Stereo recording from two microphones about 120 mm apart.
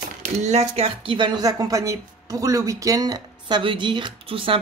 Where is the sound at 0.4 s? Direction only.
65° right (ahead or behind).